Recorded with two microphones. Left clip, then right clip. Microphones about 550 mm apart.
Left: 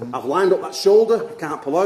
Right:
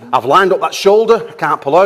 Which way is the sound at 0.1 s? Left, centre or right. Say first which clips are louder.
Right 8 dB; right.